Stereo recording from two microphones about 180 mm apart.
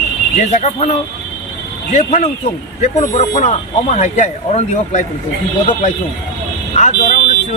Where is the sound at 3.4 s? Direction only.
40° left (ahead or behind).